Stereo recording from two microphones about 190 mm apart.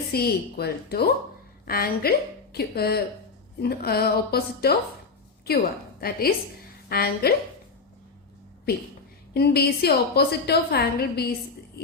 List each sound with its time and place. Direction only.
0.1 s a woman's voice: 55° left (ahead or behind)
6.0 s a woman's voice: 55° left (ahead or behind)
9.3 s a woman's voice: 55° left (ahead or behind)